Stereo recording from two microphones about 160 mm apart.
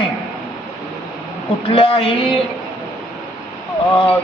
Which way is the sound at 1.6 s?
35° left (ahead or behind).